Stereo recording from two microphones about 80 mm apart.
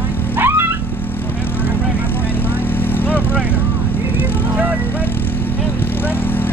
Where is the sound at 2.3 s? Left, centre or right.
Left.